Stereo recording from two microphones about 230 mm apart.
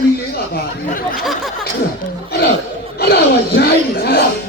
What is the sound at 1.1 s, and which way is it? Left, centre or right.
Speech, centre.